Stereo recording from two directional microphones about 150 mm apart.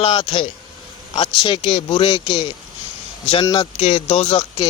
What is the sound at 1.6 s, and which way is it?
Speech, 40° left (ahead or behind).